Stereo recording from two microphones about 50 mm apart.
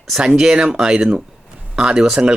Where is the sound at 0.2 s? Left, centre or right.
Centre.